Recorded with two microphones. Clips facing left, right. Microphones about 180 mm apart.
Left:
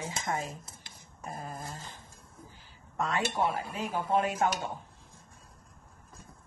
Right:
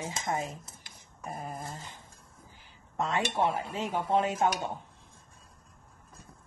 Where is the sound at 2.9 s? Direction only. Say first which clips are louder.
Right 1 dB; 20° right (ahead or behind).